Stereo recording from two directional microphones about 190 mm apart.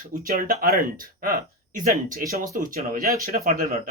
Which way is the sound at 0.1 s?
45° right (ahead or behind).